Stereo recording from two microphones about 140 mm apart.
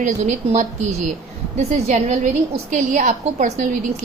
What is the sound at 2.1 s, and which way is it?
A woman's voice, 60° right (ahead or behind).